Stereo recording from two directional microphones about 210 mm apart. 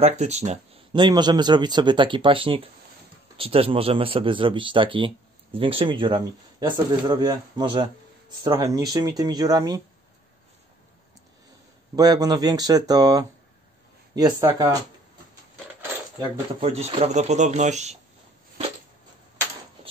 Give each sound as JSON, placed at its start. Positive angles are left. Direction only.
{"t": 0.0, "sound": "speech", "side_deg": -30}
{"t": 11.9, "sound": "speech", "side_deg": -20}
{"t": 16.2, "sound": "speech", "side_deg": -30}